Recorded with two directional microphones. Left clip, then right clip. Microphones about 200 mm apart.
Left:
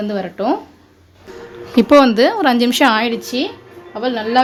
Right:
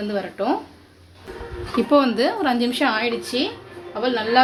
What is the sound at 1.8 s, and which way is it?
Speech, 40° left (ahead or behind).